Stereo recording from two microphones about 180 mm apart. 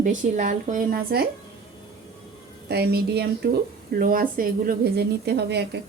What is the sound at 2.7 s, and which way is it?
Speech, 65° right (ahead or behind).